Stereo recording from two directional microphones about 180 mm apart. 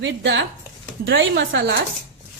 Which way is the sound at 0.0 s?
90° right.